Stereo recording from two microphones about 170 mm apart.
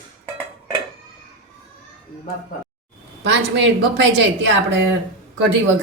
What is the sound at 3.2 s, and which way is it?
A woman's voice, 90° right.